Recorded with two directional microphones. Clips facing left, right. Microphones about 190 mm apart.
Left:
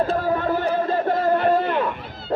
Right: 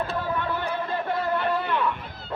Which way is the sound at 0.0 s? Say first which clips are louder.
Left 7 dB; 40° left (ahead or behind).